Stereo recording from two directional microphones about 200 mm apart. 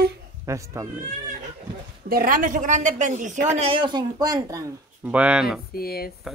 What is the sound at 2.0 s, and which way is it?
A woman's voice, 45° right (ahead or behind).